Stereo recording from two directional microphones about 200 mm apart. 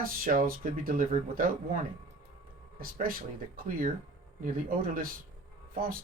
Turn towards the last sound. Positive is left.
turn(degrees=-45)  # may be behind; listen again after turning